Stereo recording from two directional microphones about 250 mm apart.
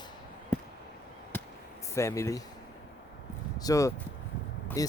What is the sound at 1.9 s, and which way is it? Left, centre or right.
Speech, centre.